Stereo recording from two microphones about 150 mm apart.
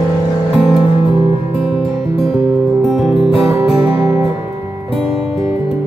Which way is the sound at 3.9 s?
40° left (ahead or behind).